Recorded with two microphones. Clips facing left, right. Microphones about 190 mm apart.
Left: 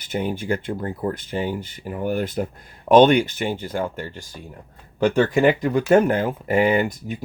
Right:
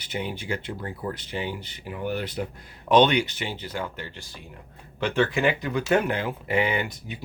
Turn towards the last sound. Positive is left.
turn(degrees=45)  # may be behind; listen again after turning